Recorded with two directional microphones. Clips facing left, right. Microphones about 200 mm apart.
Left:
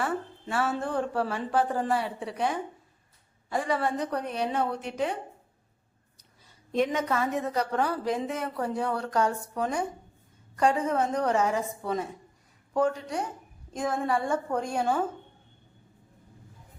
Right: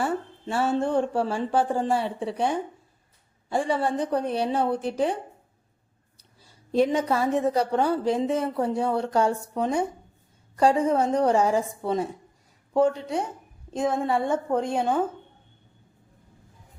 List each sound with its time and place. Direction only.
0.0 s a woman's voice: 25° right (ahead or behind)
6.1 s a woman's voice: 30° right (ahead or behind)